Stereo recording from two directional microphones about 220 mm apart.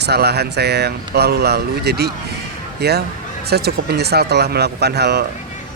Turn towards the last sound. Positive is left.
turn(degrees=-50)  # may be behind; listen again after turning